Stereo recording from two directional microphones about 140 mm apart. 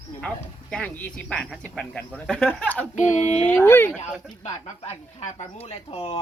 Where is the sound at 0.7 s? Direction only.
10° left (ahead or behind).